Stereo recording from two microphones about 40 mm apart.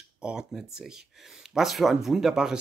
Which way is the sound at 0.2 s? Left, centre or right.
Right.